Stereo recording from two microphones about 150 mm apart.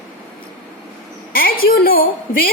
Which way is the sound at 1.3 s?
75° left (ahead or behind).